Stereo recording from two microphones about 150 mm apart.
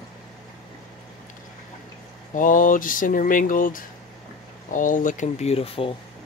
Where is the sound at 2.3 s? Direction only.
60° left (ahead or behind); by 5.9 s 40° left (ahead or behind).